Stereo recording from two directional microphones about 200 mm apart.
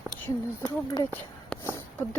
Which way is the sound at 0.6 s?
20° left (ahead or behind).